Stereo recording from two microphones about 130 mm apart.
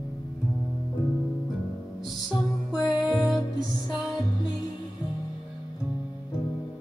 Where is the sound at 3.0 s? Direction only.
Centre (ahead or behind).